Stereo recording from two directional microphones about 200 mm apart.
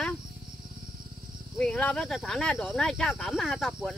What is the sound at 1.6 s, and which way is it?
Speech, 5° left (ahead or behind).